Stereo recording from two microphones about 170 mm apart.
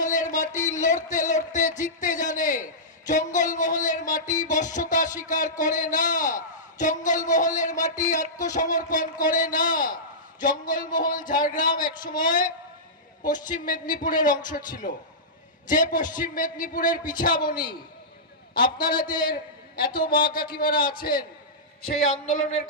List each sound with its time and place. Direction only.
0.0 s a sound: 50° left (ahead or behind)
0.8 s a man's voice: 50° left (ahead or behind)
3.1 s music: 50° left (ahead or behind)
8.1 s speech: 45° left (ahead or behind)
19.1 s a man's voice: 55° left (ahead or behind)